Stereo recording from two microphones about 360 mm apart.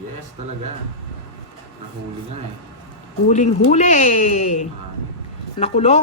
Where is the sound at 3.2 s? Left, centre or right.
Centre.